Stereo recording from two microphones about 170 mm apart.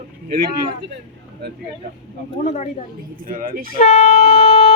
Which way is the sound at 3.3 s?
55° right (ahead or behind).